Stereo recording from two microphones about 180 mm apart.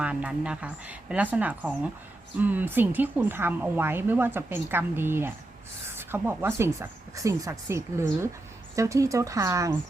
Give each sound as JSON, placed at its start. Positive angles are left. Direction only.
{"t": 0.0, "sound": "a woman's voice", "side_deg": -5}